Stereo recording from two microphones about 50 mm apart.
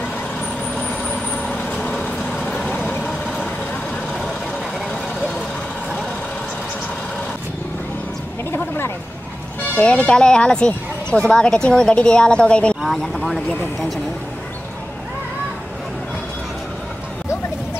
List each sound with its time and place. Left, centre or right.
1.3 s vehicle: left
8.5 s a sound: left
9.8 s speech: left
12.8 s speech: centre